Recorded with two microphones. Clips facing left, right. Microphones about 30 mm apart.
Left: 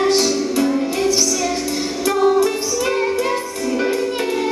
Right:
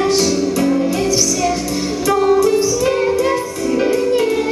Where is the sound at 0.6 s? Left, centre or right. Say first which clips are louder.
Right 2 dB; left.